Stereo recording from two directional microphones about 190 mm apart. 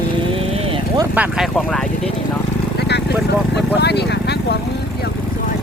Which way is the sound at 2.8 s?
60° left (ahead or behind).